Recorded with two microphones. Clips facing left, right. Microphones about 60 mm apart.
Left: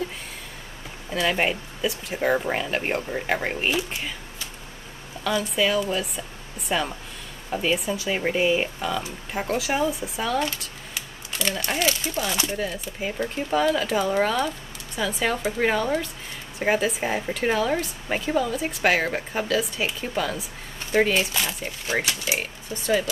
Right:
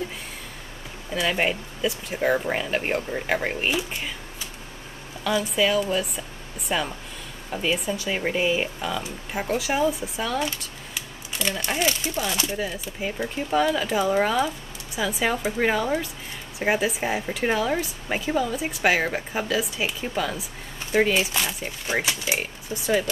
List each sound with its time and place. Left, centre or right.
1.1 s speech: centre
5.2 s speech: centre